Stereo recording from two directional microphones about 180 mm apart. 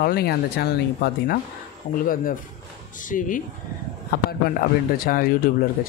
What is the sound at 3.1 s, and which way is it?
Speech, 45° left (ahead or behind).